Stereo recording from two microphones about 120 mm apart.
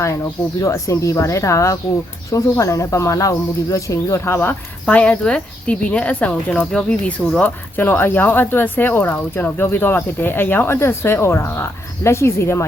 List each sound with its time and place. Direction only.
0.6 s speech: 25° left (ahead or behind)